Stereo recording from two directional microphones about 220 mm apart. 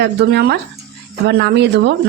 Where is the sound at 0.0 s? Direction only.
50° right (ahead or behind).